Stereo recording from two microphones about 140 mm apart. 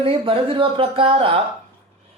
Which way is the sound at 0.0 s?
40° right (ahead or behind).